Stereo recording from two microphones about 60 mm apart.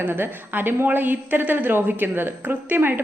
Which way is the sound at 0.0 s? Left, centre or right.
Right.